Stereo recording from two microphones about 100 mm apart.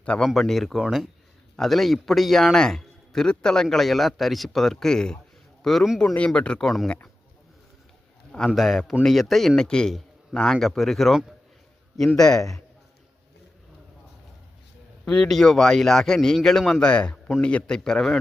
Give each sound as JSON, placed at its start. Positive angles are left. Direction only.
{"t": 0.0, "sound": "a man's voice", "side_deg": 10}
{"t": 8.4, "sound": "a man's voice", "side_deg": 0}
{"t": 15.0, "sound": "a man's voice", "side_deg": 5}